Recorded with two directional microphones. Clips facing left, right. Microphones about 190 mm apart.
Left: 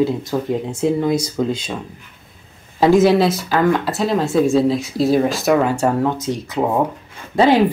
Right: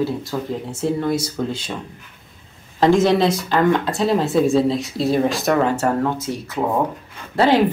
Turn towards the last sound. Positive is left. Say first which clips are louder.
# left 2 dB
turn(degrees=15)  # may be behind; listen again after turning